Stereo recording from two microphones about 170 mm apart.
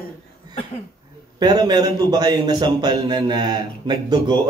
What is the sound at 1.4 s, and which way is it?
A man's voice, 25° right (ahead or behind).